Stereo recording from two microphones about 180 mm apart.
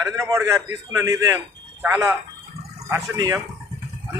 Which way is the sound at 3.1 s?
20° right (ahead or behind).